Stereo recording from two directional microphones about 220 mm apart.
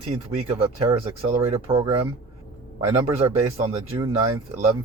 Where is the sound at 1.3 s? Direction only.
25° right (ahead or behind).